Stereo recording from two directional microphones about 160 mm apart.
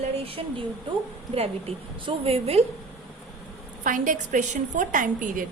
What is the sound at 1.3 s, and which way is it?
A woman's voice, 40° right (ahead or behind).